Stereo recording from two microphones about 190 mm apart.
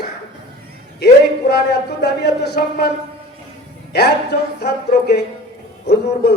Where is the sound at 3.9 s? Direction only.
60° left (ahead or behind).